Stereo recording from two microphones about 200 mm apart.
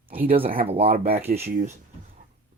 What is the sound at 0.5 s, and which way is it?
Speech, 30° right (ahead or behind).